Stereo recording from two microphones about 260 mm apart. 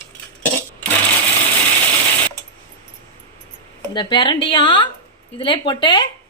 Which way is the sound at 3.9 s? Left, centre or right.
Centre.